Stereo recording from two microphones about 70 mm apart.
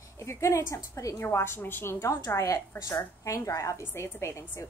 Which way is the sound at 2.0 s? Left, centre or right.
Left.